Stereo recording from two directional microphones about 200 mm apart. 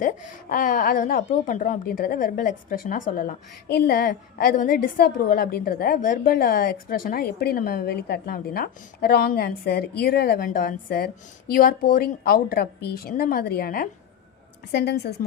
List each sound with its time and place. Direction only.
0.5 s a woman's voice: 40° left (ahead or behind)